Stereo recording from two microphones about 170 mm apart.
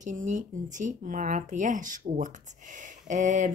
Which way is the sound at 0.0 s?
45° right (ahead or behind).